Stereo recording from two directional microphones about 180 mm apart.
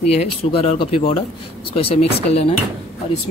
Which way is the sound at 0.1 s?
35° left (ahead or behind).